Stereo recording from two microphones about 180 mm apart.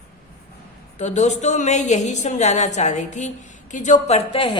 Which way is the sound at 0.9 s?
40° left (ahead or behind).